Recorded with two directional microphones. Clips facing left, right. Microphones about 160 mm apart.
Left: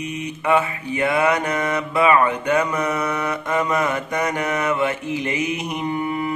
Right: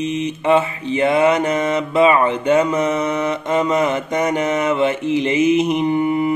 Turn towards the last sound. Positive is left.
turn(degrees=-20)  # may be behind; listen again after turning